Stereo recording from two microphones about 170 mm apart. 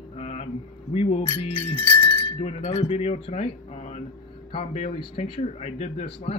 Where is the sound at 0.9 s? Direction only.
40° left (ahead or behind).